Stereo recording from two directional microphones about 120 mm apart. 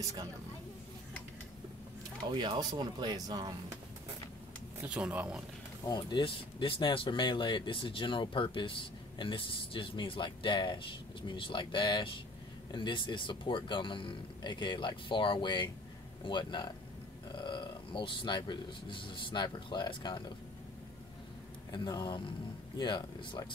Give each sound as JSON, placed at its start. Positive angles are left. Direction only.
{"t": 2.3, "sound": "speech", "side_deg": -40}
{"t": 4.8, "sound": "speech", "side_deg": -10}
{"t": 5.9, "sound": "speech", "side_deg": 35}
{"t": 21.7, "sound": "speech", "side_deg": 35}